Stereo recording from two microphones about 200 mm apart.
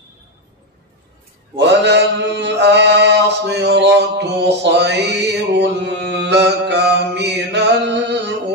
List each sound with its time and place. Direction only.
1.6 s mantra: 60° right (ahead or behind)